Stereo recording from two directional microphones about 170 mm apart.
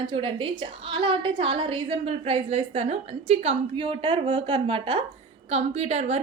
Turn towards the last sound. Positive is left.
turn(degrees=-40)  # may be behind; listen again after turning